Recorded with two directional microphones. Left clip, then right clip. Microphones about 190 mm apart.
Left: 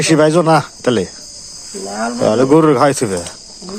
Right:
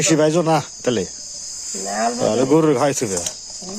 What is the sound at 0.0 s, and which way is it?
A man's voice, 5° right (ahead or behind).